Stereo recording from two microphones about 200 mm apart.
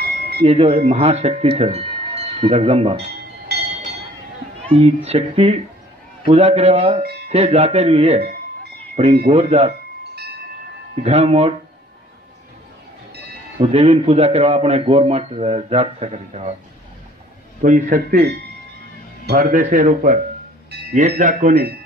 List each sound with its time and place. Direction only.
0.4 s a man's voice: 30° right (ahead or behind)
4.6 s a man's voice: 30° right (ahead or behind)
11.0 s a man's voice: 30° right (ahead or behind)
13.6 s a man's voice: 30° right (ahead or behind)
17.6 s a man's voice: 45° right (ahead or behind)